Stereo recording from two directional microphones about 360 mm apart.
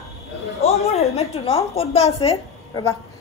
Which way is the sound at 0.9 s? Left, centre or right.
Centre.